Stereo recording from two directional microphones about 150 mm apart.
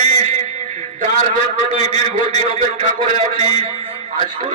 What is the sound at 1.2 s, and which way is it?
A man's voice, 45° right (ahead or behind).